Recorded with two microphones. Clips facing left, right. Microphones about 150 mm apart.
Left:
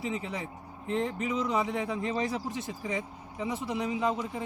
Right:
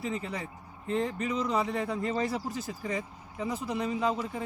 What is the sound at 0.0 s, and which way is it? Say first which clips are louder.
Speech: even; 5° left (ahead or behind).